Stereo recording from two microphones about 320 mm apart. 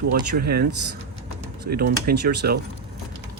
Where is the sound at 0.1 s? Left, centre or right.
Right.